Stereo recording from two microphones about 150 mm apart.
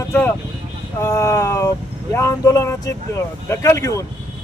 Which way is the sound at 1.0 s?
20° left (ahead or behind).